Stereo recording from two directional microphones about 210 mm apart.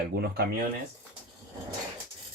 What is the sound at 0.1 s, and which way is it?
Speech, 45° right (ahead or behind).